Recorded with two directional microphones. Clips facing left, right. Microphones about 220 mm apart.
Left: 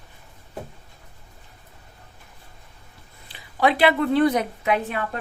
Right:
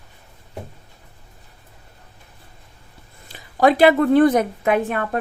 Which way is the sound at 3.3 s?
45° right (ahead or behind).